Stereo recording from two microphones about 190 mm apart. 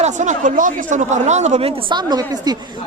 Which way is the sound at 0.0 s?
40° right (ahead or behind).